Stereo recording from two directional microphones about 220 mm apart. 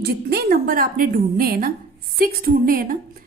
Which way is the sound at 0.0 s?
45° right (ahead or behind).